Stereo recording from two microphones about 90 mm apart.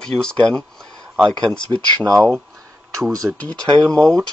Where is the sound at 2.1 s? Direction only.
35° right (ahead or behind).